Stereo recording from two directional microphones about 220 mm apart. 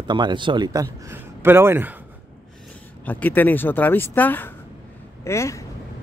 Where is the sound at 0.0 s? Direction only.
20° right (ahead or behind).